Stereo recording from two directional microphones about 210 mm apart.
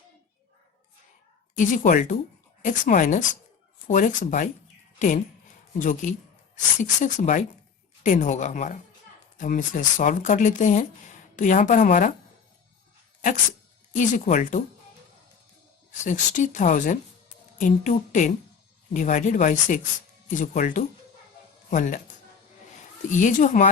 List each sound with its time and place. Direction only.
1.5 s speech: 40° left (ahead or behind)
13.9 s speech: 40° left (ahead or behind)
16.0 s speech: 35° left (ahead or behind)
23.1 s speech: 40° left (ahead or behind)